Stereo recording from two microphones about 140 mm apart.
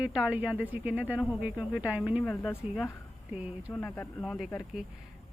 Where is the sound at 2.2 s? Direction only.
15° left (ahead or behind).